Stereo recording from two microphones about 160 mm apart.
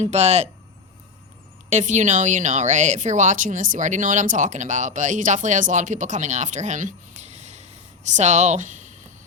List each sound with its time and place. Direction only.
0.0 s speech: 45° right (ahead or behind)
1.7 s speech: 50° right (ahead or behind)